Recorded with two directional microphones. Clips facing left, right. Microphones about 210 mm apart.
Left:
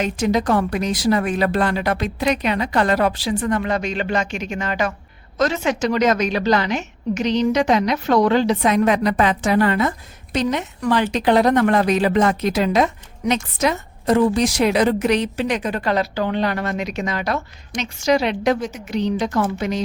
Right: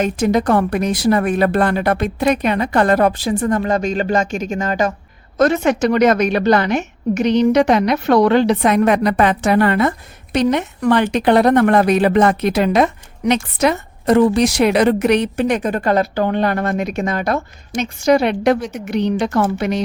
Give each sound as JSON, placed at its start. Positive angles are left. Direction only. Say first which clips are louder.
{"t": 0.0, "sound": "a woman's voice", "louder": "right 3 dB", "side_deg": -55}
{"t": 5.4, "sound": "a woman's voice", "louder": "right 5 dB", "side_deg": -55}